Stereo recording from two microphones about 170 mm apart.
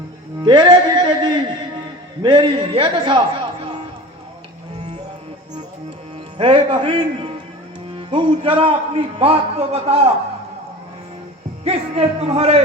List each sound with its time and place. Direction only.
0.4 s a man's voice: 25° right (ahead or behind)
6.3 s a man's voice: 30° right (ahead or behind)
11.6 s a man's voice: 35° right (ahead or behind)